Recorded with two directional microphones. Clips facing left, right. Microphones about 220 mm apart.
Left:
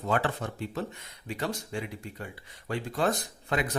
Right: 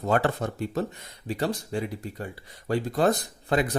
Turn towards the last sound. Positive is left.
turn(degrees=-35)  # may be behind; listen again after turning